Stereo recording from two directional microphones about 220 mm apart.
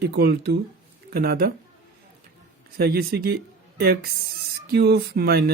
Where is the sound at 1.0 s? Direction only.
45° right (ahead or behind).